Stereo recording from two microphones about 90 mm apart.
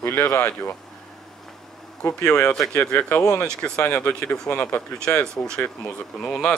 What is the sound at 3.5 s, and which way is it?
Speech, 10° left (ahead or behind).